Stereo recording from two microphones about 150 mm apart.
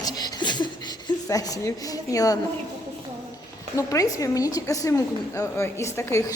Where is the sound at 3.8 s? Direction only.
20° left (ahead or behind).